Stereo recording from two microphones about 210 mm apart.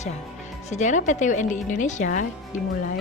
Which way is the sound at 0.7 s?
35° left (ahead or behind).